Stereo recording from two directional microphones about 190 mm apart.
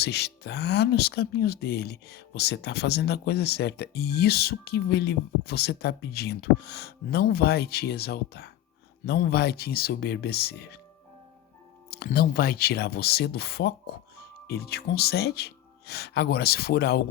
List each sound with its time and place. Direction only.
0.0 s speech: 60° left (ahead or behind)
11.9 s speech: 55° left (ahead or behind)